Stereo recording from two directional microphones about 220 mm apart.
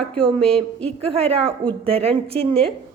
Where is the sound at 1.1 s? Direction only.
25° right (ahead or behind).